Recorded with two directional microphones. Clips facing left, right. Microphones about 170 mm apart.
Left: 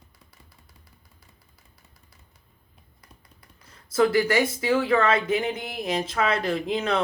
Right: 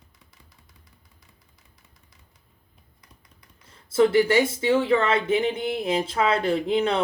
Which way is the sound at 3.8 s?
25° right (ahead or behind).